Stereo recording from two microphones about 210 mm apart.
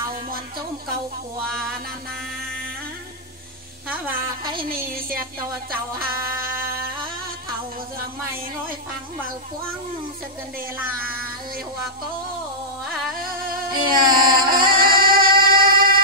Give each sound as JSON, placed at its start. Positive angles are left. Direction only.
{"t": 3.9, "sound": "a woman's voice", "side_deg": -10}
{"t": 4.6, "sound": "a woman's voice", "side_deg": -45}
{"t": 5.9, "sound": "music", "side_deg": -45}
{"t": 13.2, "sound": "music", "side_deg": -45}